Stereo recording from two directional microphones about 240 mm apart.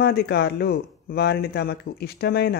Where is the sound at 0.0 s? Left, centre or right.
Left.